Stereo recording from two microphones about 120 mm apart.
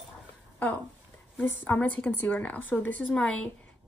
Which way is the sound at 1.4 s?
15° left (ahead or behind).